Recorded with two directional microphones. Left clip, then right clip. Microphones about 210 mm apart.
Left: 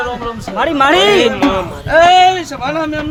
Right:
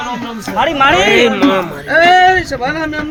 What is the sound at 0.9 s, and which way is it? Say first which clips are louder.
Speech: left 1 dB; 40° left (ahead or behind).